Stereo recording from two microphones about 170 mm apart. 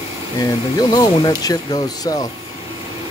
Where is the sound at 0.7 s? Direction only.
20° left (ahead or behind).